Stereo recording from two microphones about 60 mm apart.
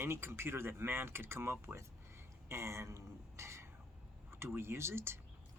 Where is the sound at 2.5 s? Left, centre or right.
Right.